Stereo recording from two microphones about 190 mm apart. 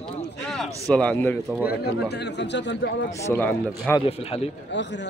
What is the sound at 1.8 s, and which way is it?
Speech, 60° left (ahead or behind).